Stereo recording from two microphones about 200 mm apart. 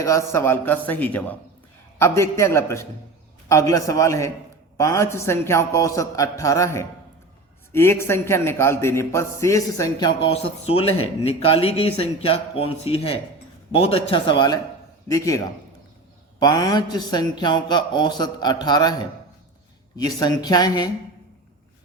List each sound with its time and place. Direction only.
0.0 s a man's voice: 15° left (ahead or behind)
20.0 s a man's voice: 20° left (ahead or behind)